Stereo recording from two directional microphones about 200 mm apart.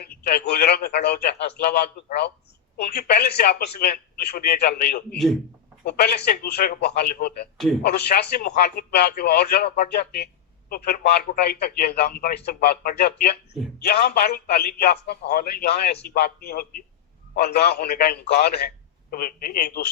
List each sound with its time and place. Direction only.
0.0 s a man's voice: 50° left (ahead or behind)